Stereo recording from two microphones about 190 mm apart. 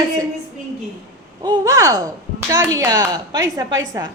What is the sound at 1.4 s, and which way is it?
A woman's voice, 20° right (ahead or behind).